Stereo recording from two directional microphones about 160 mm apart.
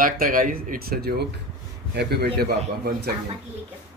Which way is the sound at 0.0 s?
60° right (ahead or behind).